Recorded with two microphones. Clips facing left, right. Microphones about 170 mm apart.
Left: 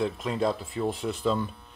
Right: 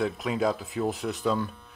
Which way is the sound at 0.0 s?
Centre (ahead or behind).